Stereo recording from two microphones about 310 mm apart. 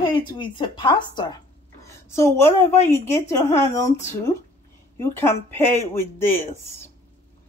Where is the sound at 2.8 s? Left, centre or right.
Centre.